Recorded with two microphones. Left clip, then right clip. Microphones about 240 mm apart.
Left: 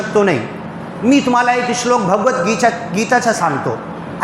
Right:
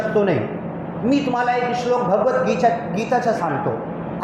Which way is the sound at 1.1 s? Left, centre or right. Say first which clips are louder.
Left 7 dB; left.